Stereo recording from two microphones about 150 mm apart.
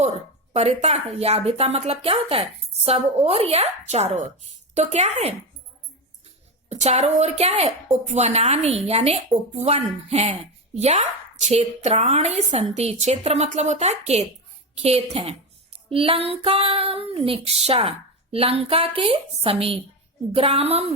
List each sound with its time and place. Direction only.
0.5 s speech: 45° right (ahead or behind)
6.7 s speech: 45° right (ahead or behind)